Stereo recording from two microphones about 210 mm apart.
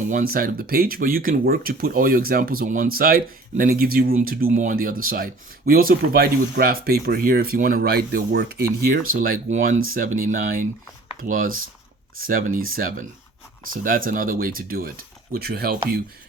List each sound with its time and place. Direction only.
0.1 s speech: 40° right (ahead or behind)